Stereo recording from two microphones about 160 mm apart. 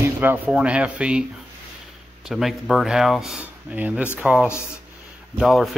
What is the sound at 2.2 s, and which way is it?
Speech, centre (ahead or behind).